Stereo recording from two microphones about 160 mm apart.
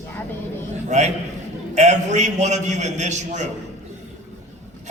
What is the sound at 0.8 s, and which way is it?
A man's voice, 45° right (ahead or behind).